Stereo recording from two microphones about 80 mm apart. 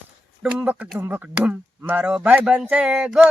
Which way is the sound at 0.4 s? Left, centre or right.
Centre.